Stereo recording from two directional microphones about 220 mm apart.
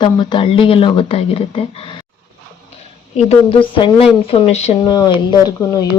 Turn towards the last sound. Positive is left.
turn(degrees=15)  # may be behind; listen again after turning